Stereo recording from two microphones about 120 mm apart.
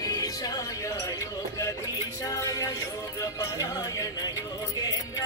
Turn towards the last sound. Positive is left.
turn(degrees=30)  # may be behind; listen again after turning